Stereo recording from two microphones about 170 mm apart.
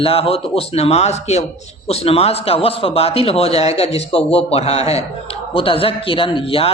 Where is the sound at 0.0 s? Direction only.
35° left (ahead or behind).